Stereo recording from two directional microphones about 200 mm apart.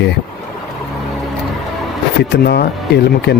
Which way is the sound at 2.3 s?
55° left (ahead or behind).